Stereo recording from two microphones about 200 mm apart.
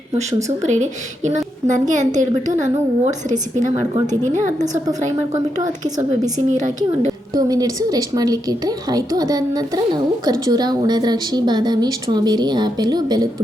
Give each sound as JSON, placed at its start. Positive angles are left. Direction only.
{"t": 0.6, "sound": "speech", "side_deg": -35}
{"t": 3.9, "sound": "a woman's voice", "side_deg": -20}
{"t": 5.6, "sound": "a woman's voice", "side_deg": -20}